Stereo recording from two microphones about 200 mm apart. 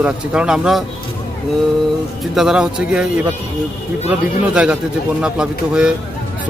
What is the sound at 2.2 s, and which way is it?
A man's voice, centre (ahead or behind).